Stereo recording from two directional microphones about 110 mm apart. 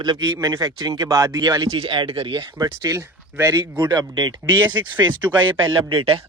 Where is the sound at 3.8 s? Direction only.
40° right (ahead or behind).